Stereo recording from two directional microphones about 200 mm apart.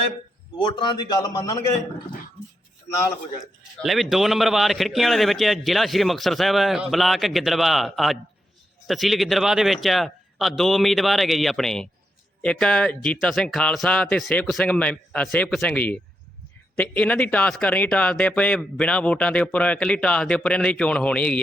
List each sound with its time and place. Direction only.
0.6 s a man's voice: 20° left (ahead or behind)
3.8 s speech: centre (ahead or behind)